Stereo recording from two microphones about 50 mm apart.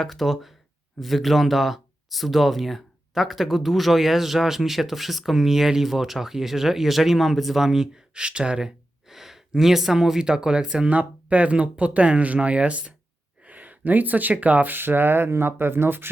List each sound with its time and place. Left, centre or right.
0.0 s speech: centre
10.8 s speech: right